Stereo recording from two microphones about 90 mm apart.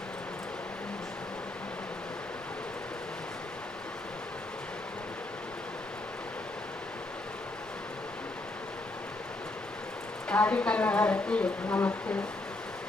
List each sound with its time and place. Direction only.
10.2 s a woman's voice: 15° left (ahead or behind)